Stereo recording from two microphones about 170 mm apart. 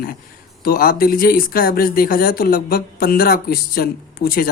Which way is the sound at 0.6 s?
60° left (ahead or behind).